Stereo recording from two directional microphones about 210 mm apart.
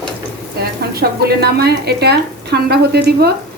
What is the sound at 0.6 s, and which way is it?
Speech, 50° right (ahead or behind).